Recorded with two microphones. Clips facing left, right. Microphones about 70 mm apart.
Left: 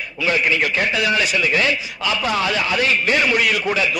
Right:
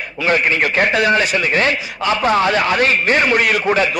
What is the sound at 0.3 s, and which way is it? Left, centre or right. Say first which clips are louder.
A man's voice: right 3 dB; right.